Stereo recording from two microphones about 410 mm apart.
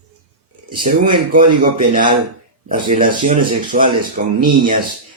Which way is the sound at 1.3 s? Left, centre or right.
Centre.